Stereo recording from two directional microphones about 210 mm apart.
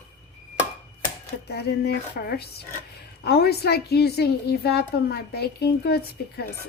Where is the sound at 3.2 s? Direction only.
50° left (ahead or behind).